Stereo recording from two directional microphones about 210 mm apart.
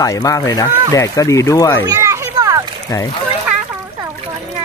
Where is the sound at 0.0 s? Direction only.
15° left (ahead or behind).